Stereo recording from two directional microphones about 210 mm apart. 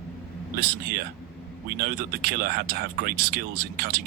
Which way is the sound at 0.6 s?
45° right (ahead or behind).